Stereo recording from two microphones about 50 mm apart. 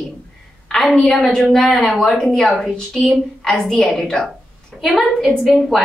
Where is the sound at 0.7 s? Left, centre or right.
Centre.